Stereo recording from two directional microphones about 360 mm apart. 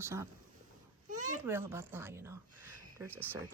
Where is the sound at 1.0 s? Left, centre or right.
Right.